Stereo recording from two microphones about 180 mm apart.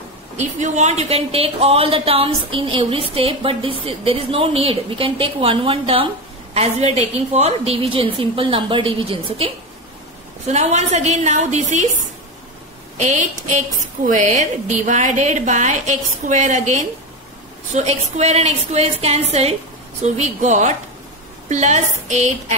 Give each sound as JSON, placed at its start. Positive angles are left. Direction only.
{"t": 0.4, "sound": "speech", "side_deg": -40}
{"t": 13.2, "sound": "speech", "side_deg": -45}